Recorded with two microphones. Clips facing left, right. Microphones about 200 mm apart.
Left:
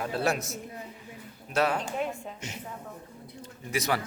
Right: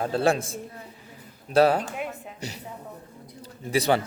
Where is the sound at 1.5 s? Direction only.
35° right (ahead or behind).